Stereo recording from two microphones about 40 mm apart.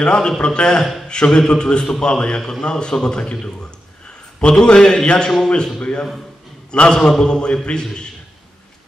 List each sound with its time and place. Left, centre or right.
0.0 s a man's voice: left
4.4 s a man's voice: left
6.7 s a man's voice: left